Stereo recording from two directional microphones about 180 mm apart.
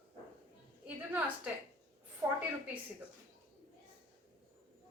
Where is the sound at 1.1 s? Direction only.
10° right (ahead or behind).